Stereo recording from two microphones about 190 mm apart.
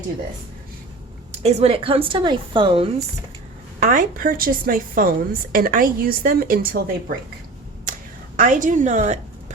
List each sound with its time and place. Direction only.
1.3 s speech: 35° right (ahead or behind)
3.8 s a woman's voice: 50° right (ahead or behind)
8.4 s a woman's voice: 45° right (ahead or behind)